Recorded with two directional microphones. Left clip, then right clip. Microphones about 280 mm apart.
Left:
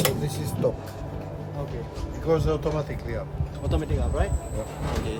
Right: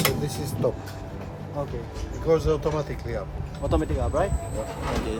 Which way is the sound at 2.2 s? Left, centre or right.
Centre.